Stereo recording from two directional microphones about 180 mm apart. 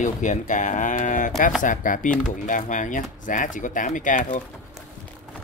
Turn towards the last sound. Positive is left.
turn(degrees=45)  # may be behind; listen again after turning